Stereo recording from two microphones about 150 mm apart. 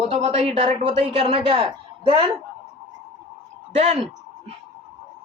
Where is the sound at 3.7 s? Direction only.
45° right (ahead or behind).